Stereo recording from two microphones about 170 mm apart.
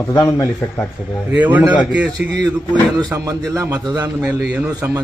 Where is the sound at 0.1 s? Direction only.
15° left (ahead or behind).